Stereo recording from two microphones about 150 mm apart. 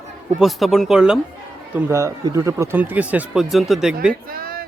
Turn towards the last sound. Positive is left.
turn(degrees=-75)  # may be behind; listen again after turning